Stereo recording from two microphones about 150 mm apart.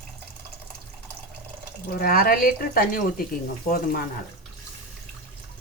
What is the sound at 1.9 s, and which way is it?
Speech, 90° left.